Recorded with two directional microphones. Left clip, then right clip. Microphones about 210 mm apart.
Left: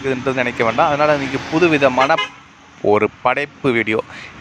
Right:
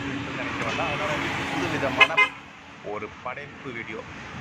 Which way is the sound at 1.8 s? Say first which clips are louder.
Left 5 dB; 40° left (ahead or behind).